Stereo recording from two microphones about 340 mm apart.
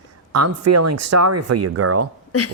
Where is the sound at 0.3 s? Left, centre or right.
Right.